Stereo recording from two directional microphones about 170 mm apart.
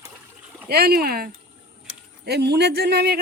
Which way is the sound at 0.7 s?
65° right (ahead or behind).